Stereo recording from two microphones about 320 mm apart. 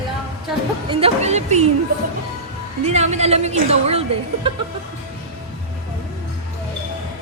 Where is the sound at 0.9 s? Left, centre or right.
Centre.